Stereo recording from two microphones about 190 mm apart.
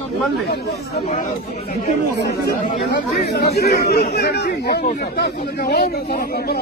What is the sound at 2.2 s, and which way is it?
Speech, 60° left (ahead or behind).